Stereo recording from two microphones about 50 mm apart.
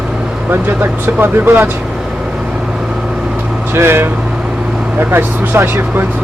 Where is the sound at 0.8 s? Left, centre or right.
Right.